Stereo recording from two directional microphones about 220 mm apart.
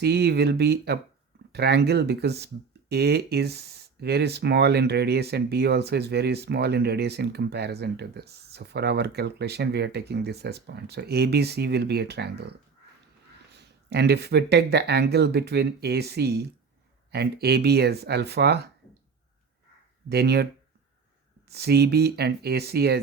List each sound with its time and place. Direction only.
0.0 s speech: 50° right (ahead or behind)
13.5 s speech: 50° right (ahead or behind)
20.1 s speech: 45° right (ahead or behind)
21.5 s speech: 45° right (ahead or behind)